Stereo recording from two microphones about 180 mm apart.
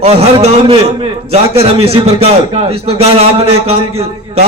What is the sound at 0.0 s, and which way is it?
A man's voice, 35° right (ahead or behind).